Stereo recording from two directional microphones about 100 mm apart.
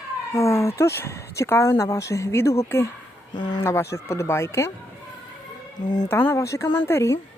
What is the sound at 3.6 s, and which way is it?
Speech, 30° left (ahead or behind).